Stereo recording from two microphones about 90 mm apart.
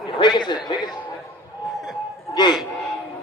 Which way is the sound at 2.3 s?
55° left (ahead or behind).